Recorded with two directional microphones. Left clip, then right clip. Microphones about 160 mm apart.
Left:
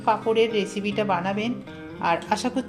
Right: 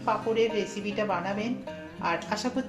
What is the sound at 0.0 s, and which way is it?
A woman's voice, 55° left (ahead or behind).